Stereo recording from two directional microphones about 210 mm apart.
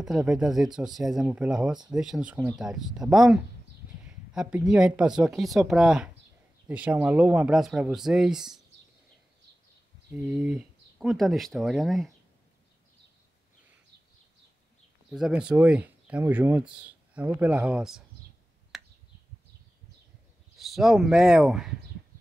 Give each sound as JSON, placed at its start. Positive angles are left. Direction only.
{"t": 0.0, "sound": "speech", "side_deg": 0}
{"t": 10.1, "sound": "speech", "side_deg": -5}
{"t": 15.0, "sound": "speech", "side_deg": 0}
{"t": 18.7, "sound": "a sound", "side_deg": 0}
{"t": 20.5, "sound": "speech", "side_deg": 0}